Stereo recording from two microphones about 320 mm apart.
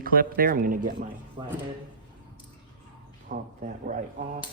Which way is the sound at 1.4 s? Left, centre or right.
Centre.